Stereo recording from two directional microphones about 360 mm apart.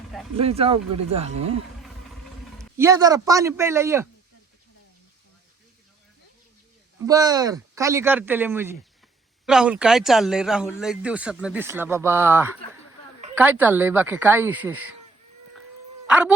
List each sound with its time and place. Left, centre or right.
0.3 s speech: centre
2.6 s speech: centre
7.0 s speech: centre
16.0 s speech: centre